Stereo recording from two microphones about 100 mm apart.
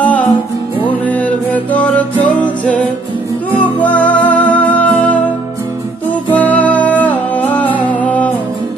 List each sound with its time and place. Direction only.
0.0 s music: 15° left (ahead or behind)
6.3 s music: 15° left (ahead or behind)